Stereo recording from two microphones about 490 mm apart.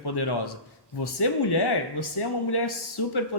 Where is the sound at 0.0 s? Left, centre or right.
Left.